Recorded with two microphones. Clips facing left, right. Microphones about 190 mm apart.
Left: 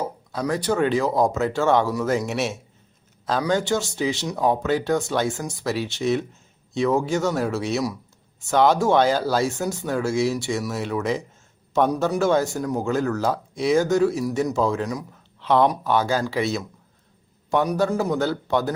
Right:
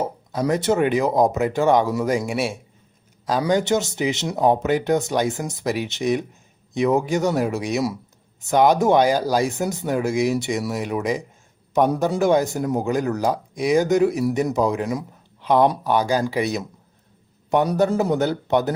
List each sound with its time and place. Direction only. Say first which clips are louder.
0.0 s a man's voice: right 3 dB; 20° right (ahead or behind)
17.7 s speech: right 3 dB; 20° right (ahead or behind)